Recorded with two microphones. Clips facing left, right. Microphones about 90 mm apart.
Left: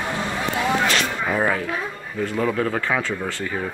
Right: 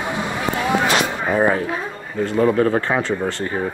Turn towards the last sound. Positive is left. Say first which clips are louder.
# right 4 dB
turn(degrees=-25)  # may be behind; listen again after turning